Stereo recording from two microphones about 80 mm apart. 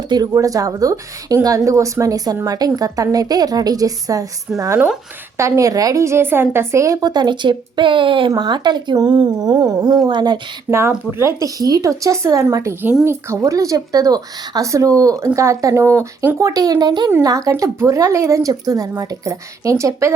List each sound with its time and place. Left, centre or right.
0.3 s speech: right
7.1 s speech: right
8.4 s speech: right
10.7 s speech: right
16.5 s speech: right
17.2 s speech: right